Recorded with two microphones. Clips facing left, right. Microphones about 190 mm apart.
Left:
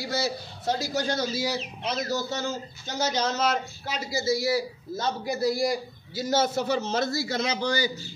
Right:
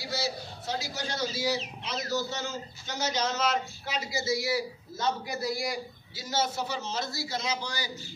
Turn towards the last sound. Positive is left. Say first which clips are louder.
# left 8 dB
turn(degrees=65)  # may be behind; listen again after turning